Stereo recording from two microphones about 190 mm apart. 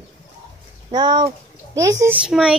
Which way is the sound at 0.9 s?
25° right (ahead or behind).